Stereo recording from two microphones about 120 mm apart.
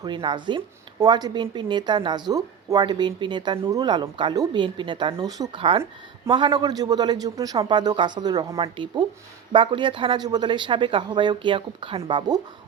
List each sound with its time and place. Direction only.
0.0 s speech: 40° right (ahead or behind)
3.6 s speech: 30° right (ahead or behind)
5.5 s speech: 50° right (ahead or behind)
8.5 s speech: 45° right (ahead or behind)